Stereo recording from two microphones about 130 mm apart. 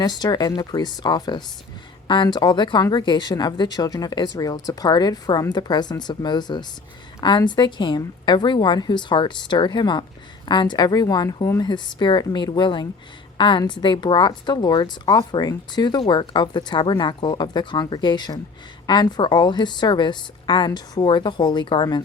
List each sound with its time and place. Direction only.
0.0 s speech: 30° left (ahead or behind)